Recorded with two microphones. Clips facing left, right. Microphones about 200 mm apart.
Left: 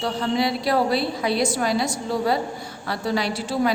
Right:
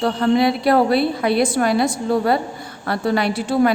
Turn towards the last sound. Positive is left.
turn(degrees=-55)  # may be behind; listen again after turning